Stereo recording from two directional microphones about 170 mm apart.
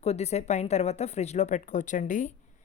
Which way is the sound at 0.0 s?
40° left (ahead or behind).